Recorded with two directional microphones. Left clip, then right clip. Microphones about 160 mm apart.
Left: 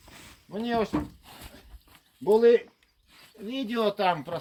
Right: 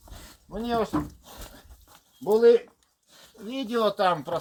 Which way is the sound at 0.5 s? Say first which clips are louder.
Right 1 dB; 25° left (ahead or behind).